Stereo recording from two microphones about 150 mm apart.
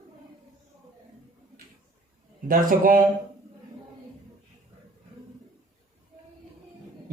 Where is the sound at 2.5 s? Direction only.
70° right (ahead or behind).